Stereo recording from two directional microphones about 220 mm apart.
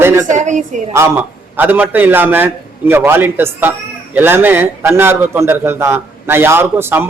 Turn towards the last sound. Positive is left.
turn(degrees=-10)  # may be behind; listen again after turning